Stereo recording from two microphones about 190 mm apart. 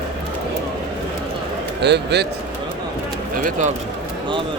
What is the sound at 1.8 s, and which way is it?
Speech, 60° right (ahead or behind).